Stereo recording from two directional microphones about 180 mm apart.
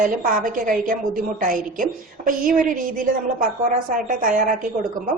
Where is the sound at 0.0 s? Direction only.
50° right (ahead or behind).